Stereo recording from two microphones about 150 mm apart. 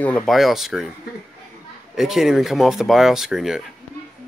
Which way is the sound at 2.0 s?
Centre (ahead or behind).